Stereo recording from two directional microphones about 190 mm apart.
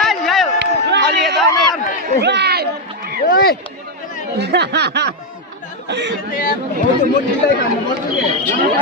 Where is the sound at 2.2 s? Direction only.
60° right (ahead or behind).